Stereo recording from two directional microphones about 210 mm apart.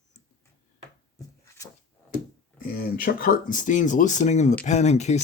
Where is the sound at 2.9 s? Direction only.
45° left (ahead or behind).